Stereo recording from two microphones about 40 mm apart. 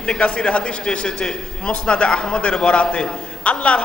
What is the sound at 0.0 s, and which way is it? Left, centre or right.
A man's voice, left.